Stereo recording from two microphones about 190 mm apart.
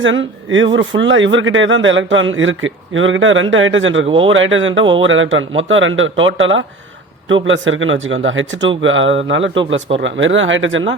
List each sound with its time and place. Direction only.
0.0 s speech: 85° right
4.0 s speech: 30° right (ahead or behind)
4.3 s speech: 90° right